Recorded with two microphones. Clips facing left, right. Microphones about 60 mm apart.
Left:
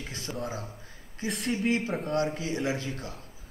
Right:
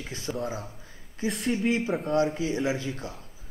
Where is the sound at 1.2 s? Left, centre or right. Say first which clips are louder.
Right 2 dB; centre.